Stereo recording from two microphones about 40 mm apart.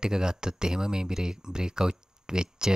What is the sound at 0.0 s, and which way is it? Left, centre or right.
Speech, centre.